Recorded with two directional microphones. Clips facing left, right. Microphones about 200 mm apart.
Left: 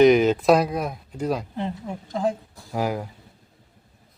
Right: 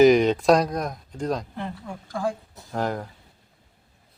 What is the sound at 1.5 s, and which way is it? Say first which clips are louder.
Speech: left 4 dB; 20° left (ahead or behind).